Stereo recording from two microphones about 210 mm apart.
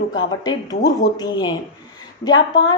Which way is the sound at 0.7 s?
30° left (ahead or behind).